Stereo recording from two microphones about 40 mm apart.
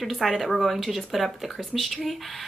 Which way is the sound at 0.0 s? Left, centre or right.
Centre.